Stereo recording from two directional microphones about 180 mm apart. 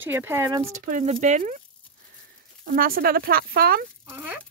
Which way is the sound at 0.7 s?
45° right (ahead or behind).